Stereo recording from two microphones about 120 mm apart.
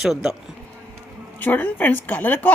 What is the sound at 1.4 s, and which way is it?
A woman's voice, 15° left (ahead or behind).